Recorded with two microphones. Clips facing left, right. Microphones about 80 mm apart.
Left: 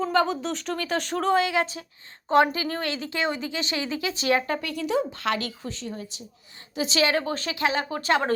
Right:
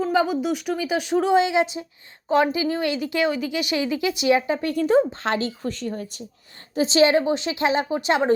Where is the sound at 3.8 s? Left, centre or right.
Left.